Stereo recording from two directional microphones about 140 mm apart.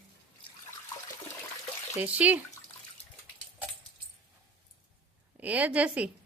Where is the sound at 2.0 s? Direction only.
10° right (ahead or behind).